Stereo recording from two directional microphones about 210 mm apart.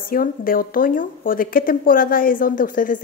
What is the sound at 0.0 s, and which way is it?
A woman's voice, 45° left (ahead or behind).